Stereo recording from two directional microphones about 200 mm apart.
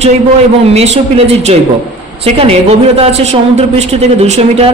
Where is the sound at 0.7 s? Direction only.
30° right (ahead or behind).